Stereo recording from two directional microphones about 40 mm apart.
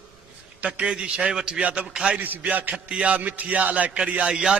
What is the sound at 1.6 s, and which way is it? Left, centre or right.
Music, right.